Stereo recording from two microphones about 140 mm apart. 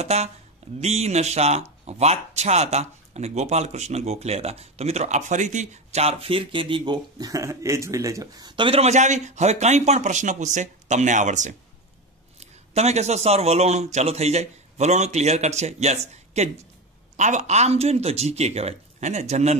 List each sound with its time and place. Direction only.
0.0 s speech: 50° right (ahead or behind)
6.8 s speech: 25° right (ahead or behind); by 19.6 s 50° right (ahead or behind)